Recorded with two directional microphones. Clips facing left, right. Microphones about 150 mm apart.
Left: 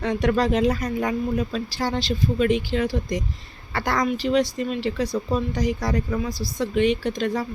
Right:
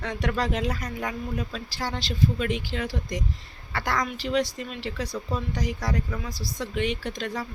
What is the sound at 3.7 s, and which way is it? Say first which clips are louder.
Speech: left 5 dB; 40° left (ahead or behind).